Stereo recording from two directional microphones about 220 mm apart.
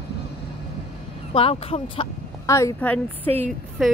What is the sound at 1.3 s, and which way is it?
Speech, 25° left (ahead or behind).